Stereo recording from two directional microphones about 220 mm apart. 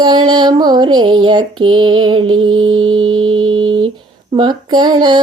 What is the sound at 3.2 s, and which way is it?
Music, 70° right (ahead or behind).